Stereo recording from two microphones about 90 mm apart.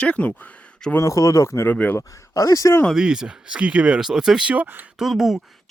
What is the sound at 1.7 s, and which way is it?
Speech, 20° left (ahead or behind).